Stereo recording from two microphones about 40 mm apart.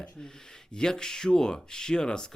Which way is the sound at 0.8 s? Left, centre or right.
Centre.